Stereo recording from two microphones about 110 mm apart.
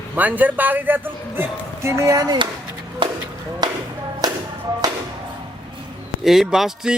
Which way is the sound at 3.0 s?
50° right (ahead or behind).